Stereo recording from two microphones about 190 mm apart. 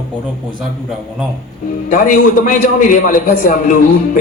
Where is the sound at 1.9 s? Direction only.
45° left (ahead or behind).